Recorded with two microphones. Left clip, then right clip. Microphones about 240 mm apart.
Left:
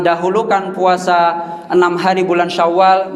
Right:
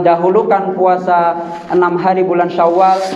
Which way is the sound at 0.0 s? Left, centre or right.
Left.